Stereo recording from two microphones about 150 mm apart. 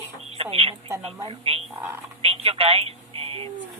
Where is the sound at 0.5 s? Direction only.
40° right (ahead or behind).